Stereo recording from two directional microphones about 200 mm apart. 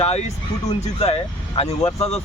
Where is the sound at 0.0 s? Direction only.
35° left (ahead or behind).